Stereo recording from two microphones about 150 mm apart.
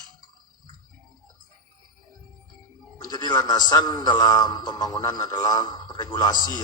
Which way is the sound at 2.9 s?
25° left (ahead or behind).